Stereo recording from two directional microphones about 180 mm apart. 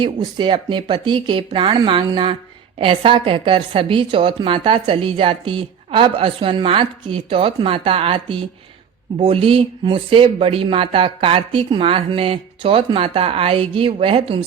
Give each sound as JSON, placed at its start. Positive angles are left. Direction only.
{"t": 0.0, "sound": "a woman's voice", "side_deg": -25}